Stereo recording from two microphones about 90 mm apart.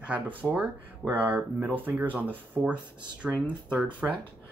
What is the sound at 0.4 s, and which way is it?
Speech, 20° right (ahead or behind).